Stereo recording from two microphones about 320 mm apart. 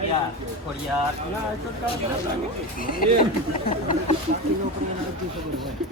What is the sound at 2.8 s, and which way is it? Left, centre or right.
Speech, left.